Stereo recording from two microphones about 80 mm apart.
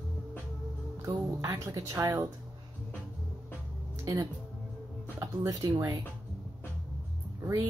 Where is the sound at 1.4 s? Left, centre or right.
Right.